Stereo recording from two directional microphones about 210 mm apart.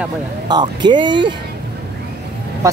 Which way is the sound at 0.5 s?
20° right (ahead or behind).